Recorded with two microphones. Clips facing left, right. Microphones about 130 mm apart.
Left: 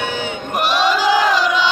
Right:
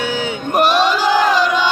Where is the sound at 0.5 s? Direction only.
45° right (ahead or behind).